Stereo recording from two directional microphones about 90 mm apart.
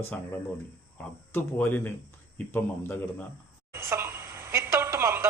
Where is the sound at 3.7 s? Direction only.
30° right (ahead or behind).